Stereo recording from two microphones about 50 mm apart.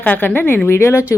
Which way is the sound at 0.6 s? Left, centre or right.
Left.